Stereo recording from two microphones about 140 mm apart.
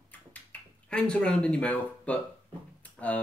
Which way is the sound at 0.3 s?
10° left (ahead or behind).